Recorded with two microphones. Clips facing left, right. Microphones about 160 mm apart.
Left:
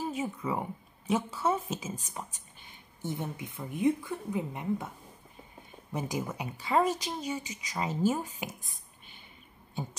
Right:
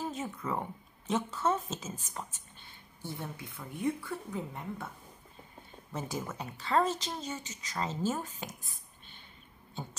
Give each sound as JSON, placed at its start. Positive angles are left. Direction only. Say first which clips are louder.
{"t": 0.0, "sound": "speech", "louder": "left 3 dB", "side_deg": 10}
{"t": 9.8, "sound": "speech", "louder": "left 4 dB", "side_deg": 10}